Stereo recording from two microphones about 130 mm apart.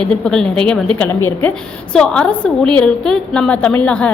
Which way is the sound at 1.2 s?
15° left (ahead or behind).